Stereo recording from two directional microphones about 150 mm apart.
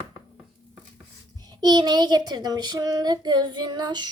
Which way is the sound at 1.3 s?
25° right (ahead or behind).